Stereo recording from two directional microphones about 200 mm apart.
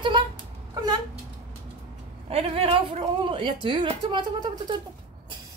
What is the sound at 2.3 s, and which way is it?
A woman's voice, 30° right (ahead or behind).